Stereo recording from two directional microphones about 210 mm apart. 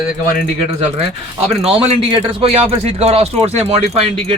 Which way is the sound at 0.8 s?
30° right (ahead or behind).